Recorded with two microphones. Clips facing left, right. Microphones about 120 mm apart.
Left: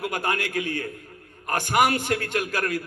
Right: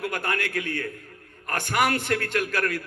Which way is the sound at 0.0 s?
15° left (ahead or behind).